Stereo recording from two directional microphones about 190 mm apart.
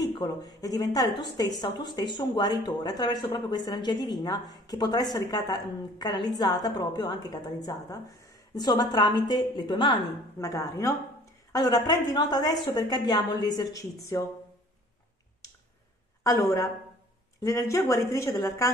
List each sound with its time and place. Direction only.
0.0 s a woman's voice: 20° left (ahead or behind)
16.3 s a woman's voice: 15° left (ahead or behind)